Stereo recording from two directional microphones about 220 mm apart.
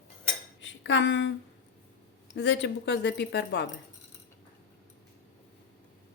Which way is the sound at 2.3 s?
50° left (ahead or behind).